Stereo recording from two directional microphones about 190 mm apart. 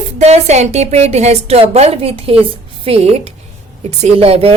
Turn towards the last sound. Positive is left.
turn(degrees=-30)  # may be behind; listen again after turning